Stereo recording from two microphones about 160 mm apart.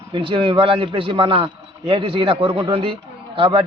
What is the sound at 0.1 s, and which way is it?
A man's voice, 30° right (ahead or behind).